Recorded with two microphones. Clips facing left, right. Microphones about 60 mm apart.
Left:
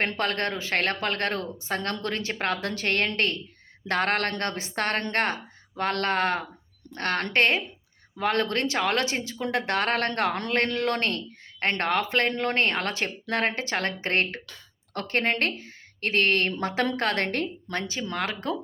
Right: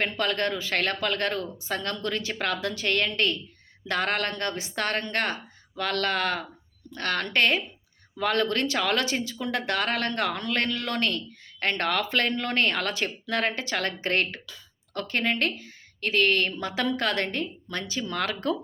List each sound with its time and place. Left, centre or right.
0.0 s speech: left
17.2 s a woman's voice: left
17.7 s speech: left